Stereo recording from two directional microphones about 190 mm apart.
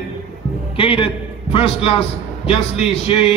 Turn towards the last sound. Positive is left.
turn(degrees=30)  # may be behind; listen again after turning